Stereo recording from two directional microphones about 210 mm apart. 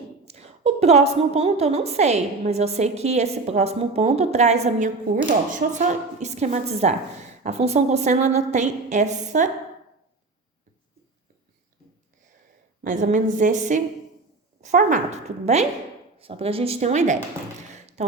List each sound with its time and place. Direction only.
0.3 s a woman's voice: 30° right (ahead or behind)
12.8 s a woman's voice: 35° right (ahead or behind)
17.7 s a sound: 35° right (ahead or behind)